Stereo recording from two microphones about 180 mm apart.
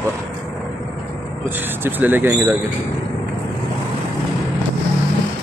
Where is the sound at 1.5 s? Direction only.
10° right (ahead or behind).